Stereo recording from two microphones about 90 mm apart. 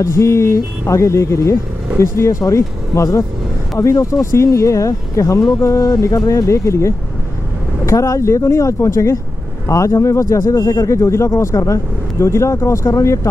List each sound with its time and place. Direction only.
0.0 s speech: 30° left (ahead or behind)